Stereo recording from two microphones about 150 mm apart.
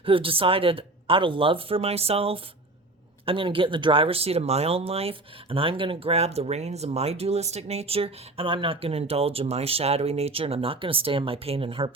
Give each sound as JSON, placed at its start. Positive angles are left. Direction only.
{"t": 0.0, "sound": "speech", "side_deg": -35}